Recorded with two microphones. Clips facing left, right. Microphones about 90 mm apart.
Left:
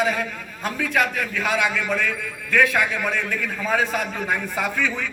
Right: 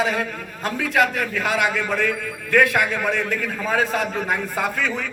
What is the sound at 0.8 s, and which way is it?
A man's voice, 40° right (ahead or behind).